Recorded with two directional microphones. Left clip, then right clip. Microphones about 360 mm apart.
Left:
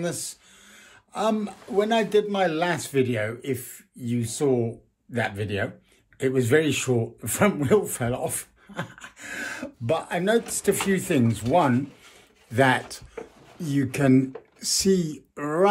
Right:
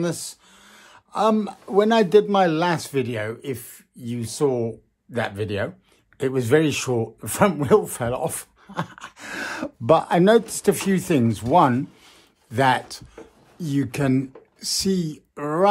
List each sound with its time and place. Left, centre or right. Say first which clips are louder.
0.0 s speech: right 3 dB; centre